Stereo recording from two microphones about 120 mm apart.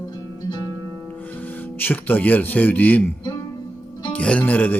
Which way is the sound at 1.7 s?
15° left (ahead or behind).